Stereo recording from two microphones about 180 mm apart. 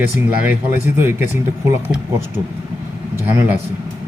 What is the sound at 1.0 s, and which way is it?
Speech, 15° right (ahead or behind).